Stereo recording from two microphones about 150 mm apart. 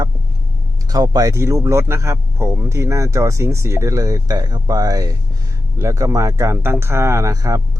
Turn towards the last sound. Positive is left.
turn(degrees=-25)  # may be behind; listen again after turning